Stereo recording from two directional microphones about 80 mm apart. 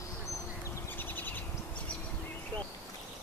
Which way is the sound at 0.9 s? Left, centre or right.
Left.